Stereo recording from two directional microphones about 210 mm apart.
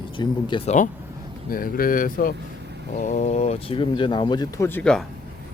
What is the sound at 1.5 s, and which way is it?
Speech, 45° left (ahead or behind).